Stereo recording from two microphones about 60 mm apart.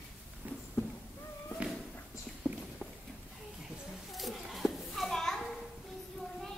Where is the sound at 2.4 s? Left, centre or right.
Right.